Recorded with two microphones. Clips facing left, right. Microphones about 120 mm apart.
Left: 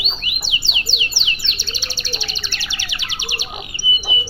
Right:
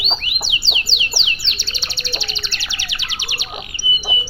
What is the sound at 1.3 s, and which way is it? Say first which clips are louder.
Chirp: left 1 dB; 15° left (ahead or behind).